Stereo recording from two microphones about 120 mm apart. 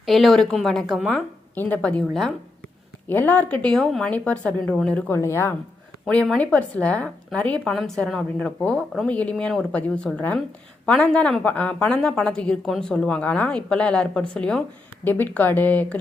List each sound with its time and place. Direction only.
0.0 s a woman's voice: centre (ahead or behind)
3.1 s a woman's voice: 15° left (ahead or behind)
6.1 s a woman's voice: 10° left (ahead or behind)